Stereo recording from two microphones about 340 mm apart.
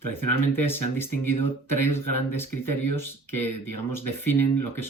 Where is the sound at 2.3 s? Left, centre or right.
Centre.